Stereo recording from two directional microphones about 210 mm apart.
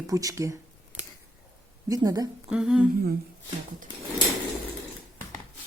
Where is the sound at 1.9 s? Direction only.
15° right (ahead or behind).